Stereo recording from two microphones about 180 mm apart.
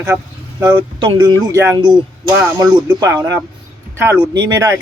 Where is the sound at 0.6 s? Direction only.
25° right (ahead or behind).